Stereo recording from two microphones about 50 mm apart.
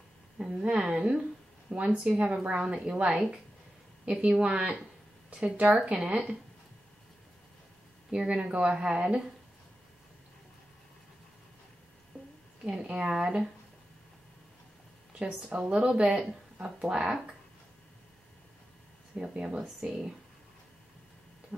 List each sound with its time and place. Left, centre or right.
0.4 s a woman's voice: centre
8.1 s a woman's voice: right
12.1 s a sound: left
12.6 s speech: centre
15.5 s a woman's voice: right
19.1 s speech: centre